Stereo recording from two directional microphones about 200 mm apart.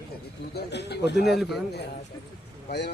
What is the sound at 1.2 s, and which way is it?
Speech, centre (ahead or behind).